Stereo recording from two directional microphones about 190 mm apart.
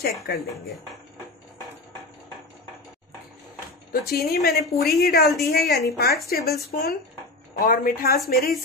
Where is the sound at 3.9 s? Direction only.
55° left (ahead or behind).